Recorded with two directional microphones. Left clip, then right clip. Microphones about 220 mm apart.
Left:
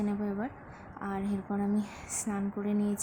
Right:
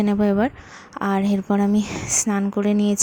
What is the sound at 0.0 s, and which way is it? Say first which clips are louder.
Speech: right 15 dB; 35° right (ahead or behind).